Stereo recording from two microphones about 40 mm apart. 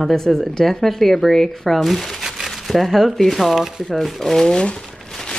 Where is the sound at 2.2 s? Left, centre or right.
Centre.